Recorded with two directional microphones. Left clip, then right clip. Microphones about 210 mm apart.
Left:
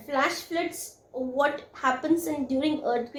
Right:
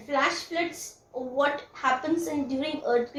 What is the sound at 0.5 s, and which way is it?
A woman's voice, 50° left (ahead or behind).